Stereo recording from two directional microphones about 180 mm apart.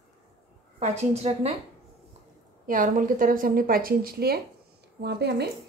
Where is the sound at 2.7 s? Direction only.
50° right (ahead or behind).